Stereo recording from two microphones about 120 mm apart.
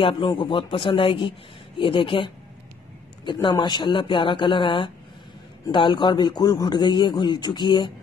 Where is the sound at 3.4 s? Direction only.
40° left (ahead or behind).